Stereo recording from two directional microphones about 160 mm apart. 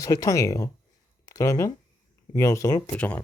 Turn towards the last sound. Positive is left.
turn(degrees=10)  # may be behind; listen again after turning